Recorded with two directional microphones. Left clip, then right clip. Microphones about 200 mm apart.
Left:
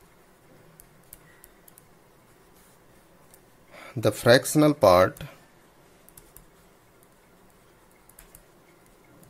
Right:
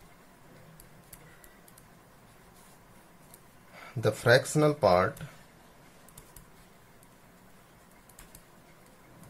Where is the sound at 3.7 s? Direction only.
50° left (ahead or behind).